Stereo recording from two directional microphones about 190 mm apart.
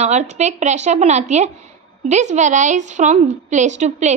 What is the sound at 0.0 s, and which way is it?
A woman's voice, 35° right (ahead or behind).